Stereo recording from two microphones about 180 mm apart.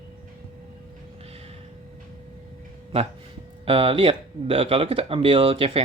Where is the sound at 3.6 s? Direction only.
30° right (ahead or behind).